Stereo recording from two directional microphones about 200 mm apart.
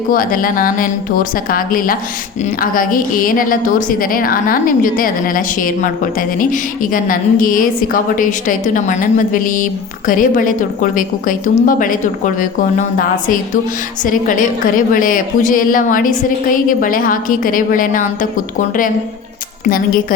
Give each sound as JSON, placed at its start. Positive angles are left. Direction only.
{"t": 0.1, "sound": "a woman's voice", "side_deg": 45}